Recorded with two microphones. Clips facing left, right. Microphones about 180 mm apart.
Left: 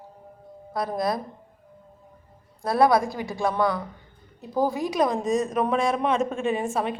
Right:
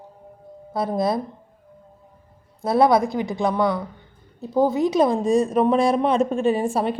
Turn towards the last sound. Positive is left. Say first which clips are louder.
# right 5 dB
turn(degrees=-35)  # may be behind; listen again after turning